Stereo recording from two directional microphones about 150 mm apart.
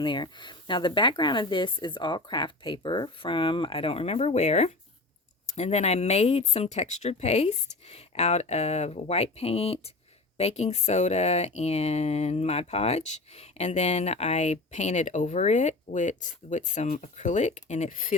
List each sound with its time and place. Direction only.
0.0 s speech: 30° left (ahead or behind); by 18.1 s 60° left (ahead or behind)